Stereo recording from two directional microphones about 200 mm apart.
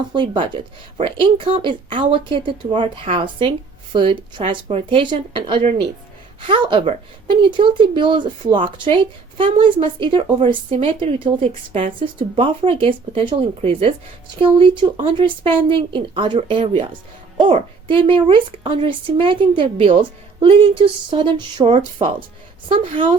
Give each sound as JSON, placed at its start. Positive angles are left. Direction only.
{"t": 0.1, "sound": "a woman's voice", "side_deg": -25}
{"t": 6.4, "sound": "a woman's voice", "side_deg": -25}